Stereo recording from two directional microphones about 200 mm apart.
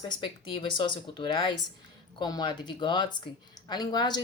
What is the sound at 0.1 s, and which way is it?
Speech, 25° left (ahead or behind).